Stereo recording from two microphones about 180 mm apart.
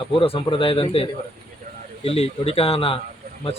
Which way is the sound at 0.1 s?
30° left (ahead or behind).